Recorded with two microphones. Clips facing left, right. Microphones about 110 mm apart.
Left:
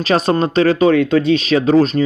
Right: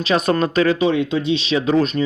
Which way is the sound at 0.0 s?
35° left (ahead or behind).